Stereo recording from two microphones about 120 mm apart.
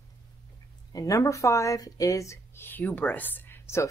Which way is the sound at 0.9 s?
30° left (ahead or behind).